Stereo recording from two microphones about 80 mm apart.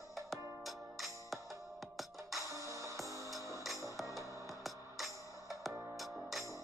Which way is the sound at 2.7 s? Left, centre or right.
Right.